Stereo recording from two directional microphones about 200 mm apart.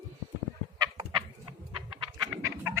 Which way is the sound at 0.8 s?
20° right (ahead or behind).